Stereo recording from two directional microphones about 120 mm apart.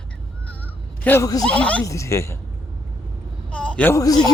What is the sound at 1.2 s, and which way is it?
Speech, 30° left (ahead or behind).